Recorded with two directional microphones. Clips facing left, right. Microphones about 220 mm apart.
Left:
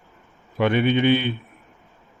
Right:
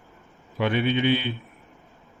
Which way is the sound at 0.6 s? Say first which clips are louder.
Left 4 dB; 55° left (ahead or behind).